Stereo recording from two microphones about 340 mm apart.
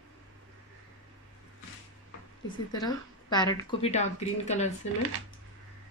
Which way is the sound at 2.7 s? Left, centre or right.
Centre.